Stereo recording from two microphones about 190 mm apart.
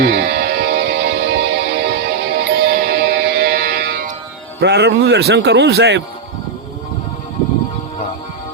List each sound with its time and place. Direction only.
0.0 s music: 55° right (ahead or behind)
4.6 s speech: 65° right (ahead or behind)